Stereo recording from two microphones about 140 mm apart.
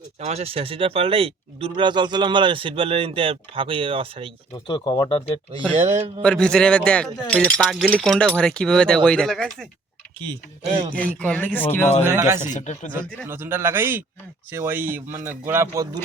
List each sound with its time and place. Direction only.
0.2 s speech: 50° right (ahead or behind)
4.5 s speech: 30° left (ahead or behind)
5.7 s a man's voice: 50° right (ahead or behind)
6.2 s speech: 5° left (ahead or behind)
10.2 s speech: 40° right (ahead or behind)
10.9 s speech: 10° left (ahead or behind)
12.5 s speech: 60° left (ahead or behind)
13.2 s a man's voice: 15° right (ahead or behind)